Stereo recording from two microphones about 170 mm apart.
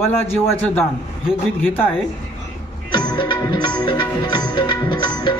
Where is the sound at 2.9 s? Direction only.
25° left (ahead or behind).